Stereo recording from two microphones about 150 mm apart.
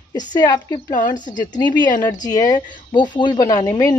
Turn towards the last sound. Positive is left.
turn(degrees=25)  # may be behind; listen again after turning